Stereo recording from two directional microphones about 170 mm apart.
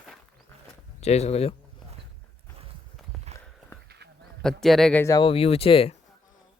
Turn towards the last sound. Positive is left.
turn(degrees=35)  # may be behind; listen again after turning